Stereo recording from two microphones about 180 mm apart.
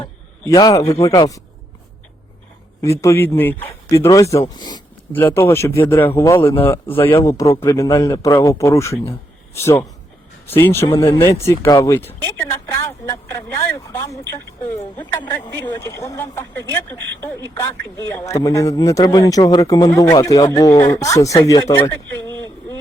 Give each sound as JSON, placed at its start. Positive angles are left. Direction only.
{"t": 0.0, "sound": "a sound", "side_deg": 20}
{"t": 1.0, "sound": "speech", "side_deg": 20}
{"t": 2.8, "sound": "speech", "side_deg": 15}
{"t": 5.1, "sound": "speech", "side_deg": 10}
{"t": 6.9, "sound": "speech", "side_deg": 30}
{"t": 7.2, "sound": "speech", "side_deg": 15}
{"t": 18.0, "sound": "speech", "side_deg": 15}